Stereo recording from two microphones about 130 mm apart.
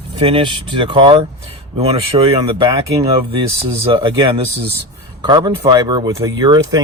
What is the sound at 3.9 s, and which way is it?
Speech, 40° right (ahead or behind).